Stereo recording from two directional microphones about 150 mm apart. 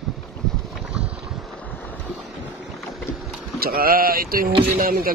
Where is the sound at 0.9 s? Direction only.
5° right (ahead or behind).